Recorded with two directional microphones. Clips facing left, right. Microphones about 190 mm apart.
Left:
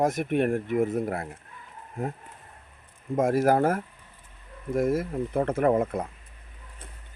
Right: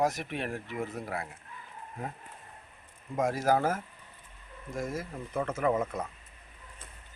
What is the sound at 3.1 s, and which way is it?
Speech, 50° left (ahead or behind).